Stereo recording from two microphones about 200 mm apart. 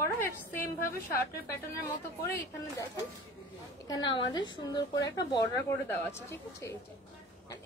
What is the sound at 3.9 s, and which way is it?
A woman's voice, 20° left (ahead or behind).